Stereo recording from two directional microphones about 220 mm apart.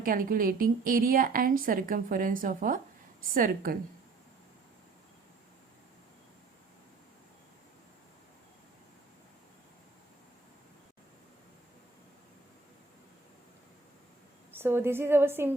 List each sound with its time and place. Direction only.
0.0 s speech: 40° right (ahead or behind)
14.5 s a woman's voice: 10° right (ahead or behind)